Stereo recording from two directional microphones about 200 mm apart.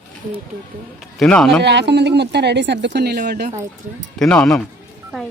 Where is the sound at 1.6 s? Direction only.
60° right (ahead or behind).